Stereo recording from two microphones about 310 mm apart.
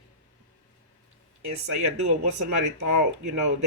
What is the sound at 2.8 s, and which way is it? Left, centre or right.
Speech, right.